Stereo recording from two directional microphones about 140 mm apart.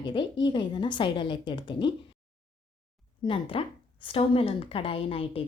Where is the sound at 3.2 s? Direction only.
40° left (ahead or behind).